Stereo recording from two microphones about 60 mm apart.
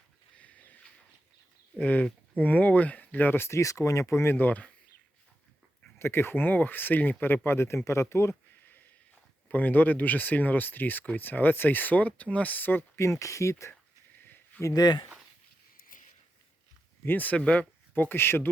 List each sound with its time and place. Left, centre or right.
0.3 s a sound: left
1.8 s speech: left
3.6 s speech: left
4.4 s speech: left
6.0 s speech: left
7.4 s speech: left
9.5 s speech: left
13.0 s speech: left
14.2 s a sound: left
17.1 s speech: left
17.9 s speech: left